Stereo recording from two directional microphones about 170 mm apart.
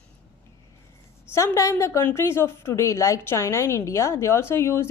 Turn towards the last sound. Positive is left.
turn(degrees=15)  # may be behind; listen again after turning